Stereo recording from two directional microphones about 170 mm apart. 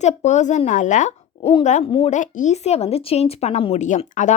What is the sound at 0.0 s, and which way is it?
Speech, 45° left (ahead or behind).